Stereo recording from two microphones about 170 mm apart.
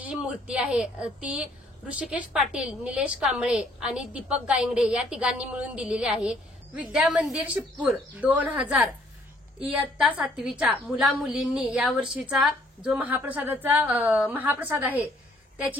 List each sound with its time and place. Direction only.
0.0 s a woman's voice: 5° right (ahead or behind)